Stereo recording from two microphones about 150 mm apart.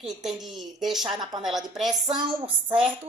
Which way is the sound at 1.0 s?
25° right (ahead or behind).